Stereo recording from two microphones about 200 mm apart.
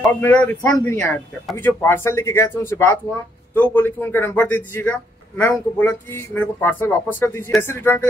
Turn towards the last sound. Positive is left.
turn(degrees=10)  # may be behind; listen again after turning